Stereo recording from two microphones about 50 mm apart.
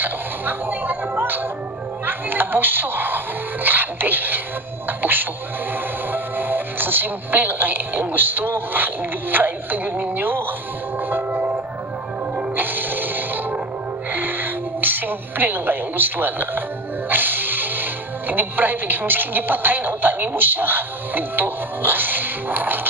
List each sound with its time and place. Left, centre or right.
0.0 s music: right
2.0 s a woman's voice: right
11.1 s music: right
18.3 s a woman's voice: right